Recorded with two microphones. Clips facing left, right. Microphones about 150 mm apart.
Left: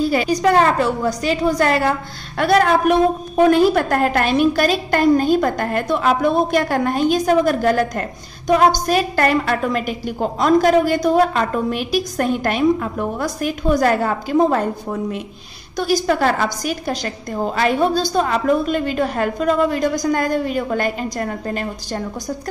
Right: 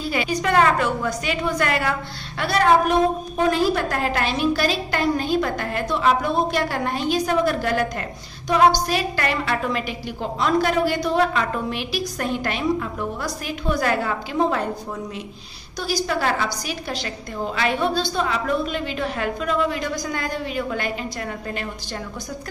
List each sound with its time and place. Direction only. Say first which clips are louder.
0.0 s a woman's voice: left 7 dB; 40° left (ahead or behind)